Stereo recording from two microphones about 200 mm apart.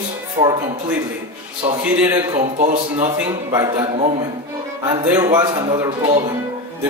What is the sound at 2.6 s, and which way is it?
Speech, 35° right (ahead or behind).